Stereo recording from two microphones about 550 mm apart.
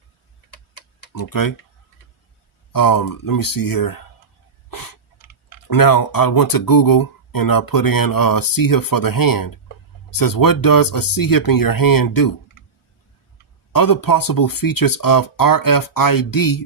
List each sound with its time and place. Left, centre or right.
1.1 s speech: left
2.7 s speech: left
4.7 s a sound: left
5.6 s speech: left
13.7 s speech: left